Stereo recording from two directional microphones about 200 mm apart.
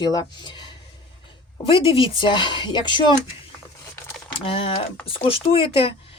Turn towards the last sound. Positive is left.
turn(degrees=25)  # may be behind; listen again after turning